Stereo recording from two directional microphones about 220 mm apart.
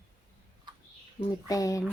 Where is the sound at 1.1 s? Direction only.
15° left (ahead or behind).